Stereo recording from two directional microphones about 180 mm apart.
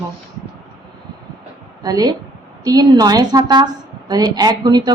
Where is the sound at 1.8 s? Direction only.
20° right (ahead or behind).